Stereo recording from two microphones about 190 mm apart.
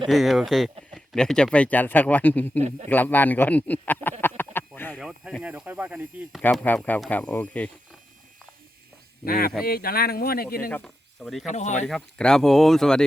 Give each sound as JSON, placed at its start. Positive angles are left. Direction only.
{"t": 0.1, "sound": "speech", "side_deg": 0}
{"t": 2.6, "sound": "a man's voice", "side_deg": -35}
{"t": 2.9, "sound": "speech", "side_deg": 10}
{"t": 4.2, "sound": "a sound", "side_deg": 10}
{"t": 4.9, "sound": "speech", "side_deg": -5}
{"t": 6.4, "sound": "speech", "side_deg": 10}
{"t": 9.2, "sound": "speech", "side_deg": 50}
{"t": 10.7, "sound": "speech", "side_deg": 5}
{"t": 11.4, "sound": "speech", "side_deg": 40}
{"t": 11.9, "sound": "speech", "side_deg": 5}